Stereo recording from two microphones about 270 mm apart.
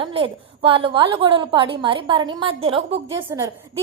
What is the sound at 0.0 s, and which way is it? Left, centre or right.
A woman's voice, centre.